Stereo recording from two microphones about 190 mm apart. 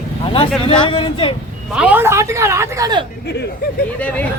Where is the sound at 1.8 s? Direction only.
10° right (ahead or behind).